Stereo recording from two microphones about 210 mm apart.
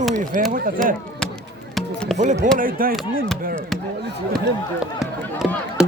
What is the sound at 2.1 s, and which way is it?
Speech, 35° right (ahead or behind).